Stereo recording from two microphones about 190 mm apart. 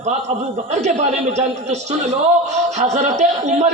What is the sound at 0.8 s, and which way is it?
Speech, 35° right (ahead or behind).